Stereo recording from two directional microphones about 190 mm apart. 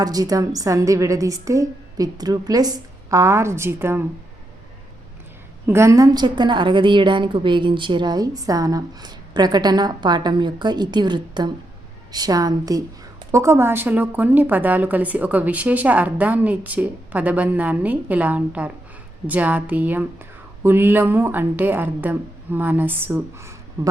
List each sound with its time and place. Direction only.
0.0 s a woman's voice: 20° right (ahead or behind)
5.6 s a woman's voice: 15° right (ahead or behind)